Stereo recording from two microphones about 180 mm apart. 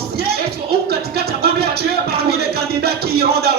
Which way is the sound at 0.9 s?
60° right (ahead or behind).